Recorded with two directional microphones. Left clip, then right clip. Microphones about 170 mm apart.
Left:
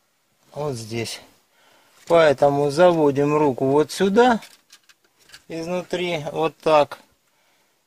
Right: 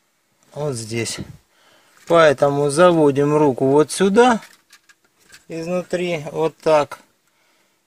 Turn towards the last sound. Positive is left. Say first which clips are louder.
# right 1 dB
turn(degrees=-10)  # may be behind; listen again after turning